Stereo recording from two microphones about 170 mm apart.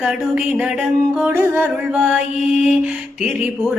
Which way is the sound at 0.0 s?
5° right (ahead or behind).